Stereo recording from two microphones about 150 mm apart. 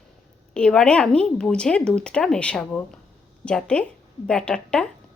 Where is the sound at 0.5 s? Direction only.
5° left (ahead or behind).